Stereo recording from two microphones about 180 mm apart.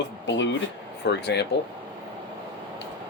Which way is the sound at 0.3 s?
90° left.